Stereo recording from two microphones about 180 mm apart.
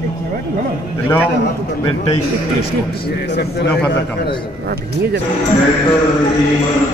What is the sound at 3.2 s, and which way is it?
Speech, 65° left (ahead or behind).